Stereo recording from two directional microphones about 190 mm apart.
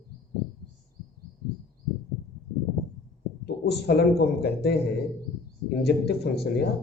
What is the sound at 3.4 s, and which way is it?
A man's voice, 60° left (ahead or behind).